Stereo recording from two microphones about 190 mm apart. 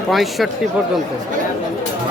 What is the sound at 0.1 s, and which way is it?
Speech, centre (ahead or behind).